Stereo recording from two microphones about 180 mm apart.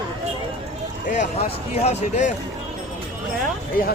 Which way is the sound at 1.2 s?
35° left (ahead or behind).